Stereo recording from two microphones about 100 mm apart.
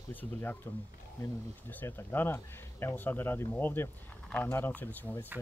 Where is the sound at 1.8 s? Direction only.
20° left (ahead or behind).